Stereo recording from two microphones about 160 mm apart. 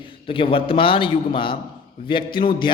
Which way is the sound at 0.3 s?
35° left (ahead or behind).